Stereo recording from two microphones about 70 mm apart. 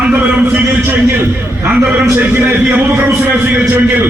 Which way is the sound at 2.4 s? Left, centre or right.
Right.